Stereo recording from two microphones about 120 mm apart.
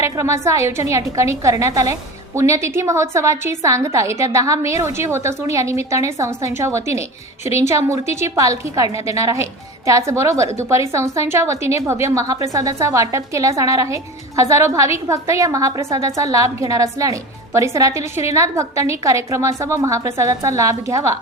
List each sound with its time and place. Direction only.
0.0 s a woman's voice: 25° right (ahead or behind)